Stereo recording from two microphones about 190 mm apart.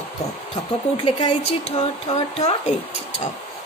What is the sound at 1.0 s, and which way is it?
Speech, 25° left (ahead or behind).